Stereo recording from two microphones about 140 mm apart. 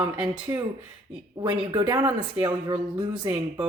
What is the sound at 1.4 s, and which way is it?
A woman's voice, 35° right (ahead or behind).